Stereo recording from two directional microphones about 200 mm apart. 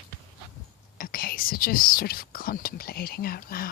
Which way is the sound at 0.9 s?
45° left (ahead or behind).